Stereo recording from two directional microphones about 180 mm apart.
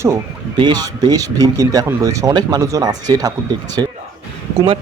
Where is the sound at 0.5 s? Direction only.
25° right (ahead or behind).